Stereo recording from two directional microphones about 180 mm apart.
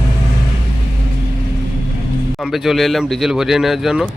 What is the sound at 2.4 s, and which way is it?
Speech, centre (ahead or behind).